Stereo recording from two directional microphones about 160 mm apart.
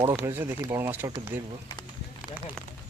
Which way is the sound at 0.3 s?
15° right (ahead or behind).